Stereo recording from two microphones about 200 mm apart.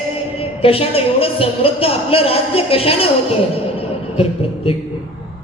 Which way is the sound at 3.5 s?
30° left (ahead or behind).